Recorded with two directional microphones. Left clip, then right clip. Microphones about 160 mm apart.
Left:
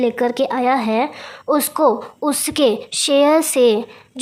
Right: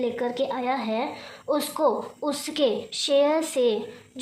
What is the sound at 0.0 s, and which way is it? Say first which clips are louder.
A woman's voice: left 8 dB; 60° left (ahead or behind).